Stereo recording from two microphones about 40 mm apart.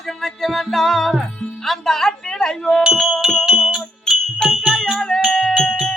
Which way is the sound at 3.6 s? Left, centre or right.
Centre.